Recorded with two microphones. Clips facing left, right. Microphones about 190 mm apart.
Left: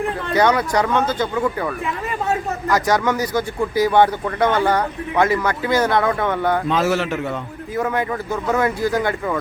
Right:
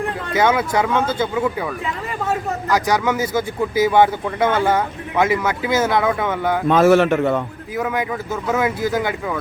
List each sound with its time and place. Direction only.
0.4 s speech: 5° right (ahead or behind)
6.7 s a man's voice: 55° right (ahead or behind)
7.8 s speech: centre (ahead or behind)